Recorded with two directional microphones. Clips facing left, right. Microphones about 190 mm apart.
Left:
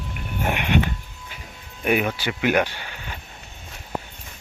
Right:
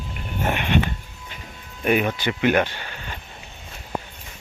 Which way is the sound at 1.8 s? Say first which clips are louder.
Right 1 dB; 10° left (ahead or behind).